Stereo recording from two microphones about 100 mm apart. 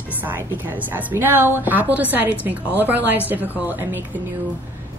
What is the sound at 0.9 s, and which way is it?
A woman's voice, 20° right (ahead or behind).